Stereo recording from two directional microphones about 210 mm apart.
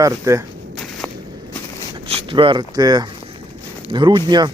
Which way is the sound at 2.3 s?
25° right (ahead or behind).